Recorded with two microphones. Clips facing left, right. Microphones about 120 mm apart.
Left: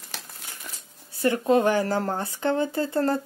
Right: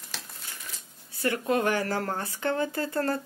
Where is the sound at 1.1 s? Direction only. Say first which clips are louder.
Left 6 dB; 25° left (ahead or behind).